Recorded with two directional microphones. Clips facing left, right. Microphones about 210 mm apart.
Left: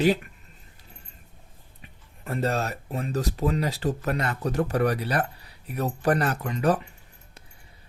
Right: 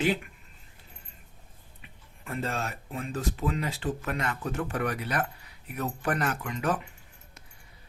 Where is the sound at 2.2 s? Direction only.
40° left (ahead or behind).